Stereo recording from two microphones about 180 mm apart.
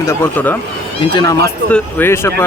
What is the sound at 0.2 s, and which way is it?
Speech, 10° left (ahead or behind).